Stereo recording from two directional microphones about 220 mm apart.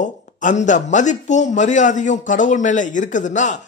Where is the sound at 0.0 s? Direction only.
35° left (ahead or behind).